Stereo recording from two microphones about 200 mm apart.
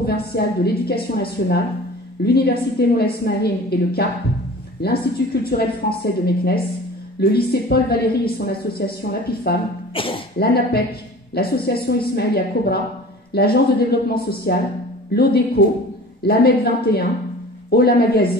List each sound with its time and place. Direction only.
0.0 s a woman's voice: 50° left (ahead or behind)
9.9 s speech: 25° left (ahead or behind)
10.4 s a woman's voice: 50° left (ahead or behind)